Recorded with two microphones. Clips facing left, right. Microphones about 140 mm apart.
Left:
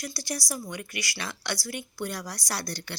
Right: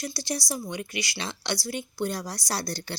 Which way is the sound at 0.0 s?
25° right (ahead or behind).